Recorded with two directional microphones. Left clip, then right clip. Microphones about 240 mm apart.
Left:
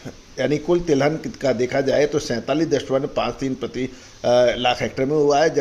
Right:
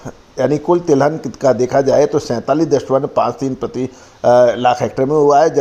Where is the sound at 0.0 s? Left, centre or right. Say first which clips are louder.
Right 7 dB; centre.